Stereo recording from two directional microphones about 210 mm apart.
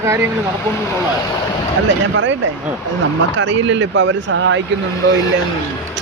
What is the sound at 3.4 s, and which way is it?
Speech, 60° right (ahead or behind).